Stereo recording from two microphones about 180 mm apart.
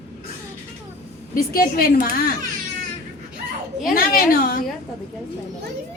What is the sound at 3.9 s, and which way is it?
Speech, 55° left (ahead or behind).